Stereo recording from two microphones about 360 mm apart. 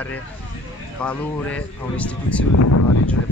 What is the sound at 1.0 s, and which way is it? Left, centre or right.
Speech, centre.